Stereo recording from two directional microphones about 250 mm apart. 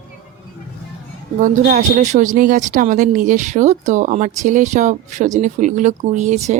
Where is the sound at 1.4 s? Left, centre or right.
Right.